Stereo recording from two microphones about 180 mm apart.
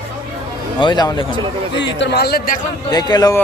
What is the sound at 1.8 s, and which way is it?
Speech, 70° left (ahead or behind).